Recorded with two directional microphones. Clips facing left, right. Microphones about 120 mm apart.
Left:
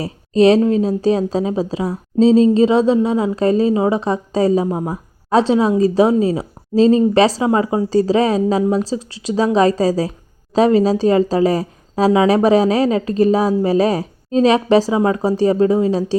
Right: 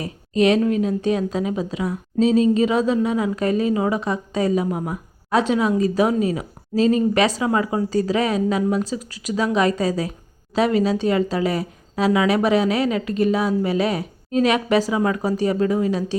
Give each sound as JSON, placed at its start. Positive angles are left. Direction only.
{"t": 0.0, "sound": "speech", "side_deg": 30}